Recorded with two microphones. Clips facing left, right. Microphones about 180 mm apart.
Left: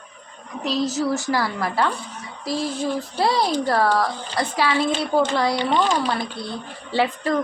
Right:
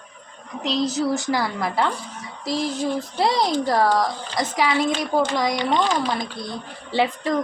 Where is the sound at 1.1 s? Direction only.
15° right (ahead or behind).